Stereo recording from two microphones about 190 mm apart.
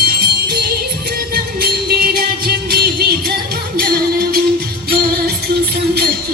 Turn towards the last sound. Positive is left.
turn(degrees=-55)  # may be behind; listen again after turning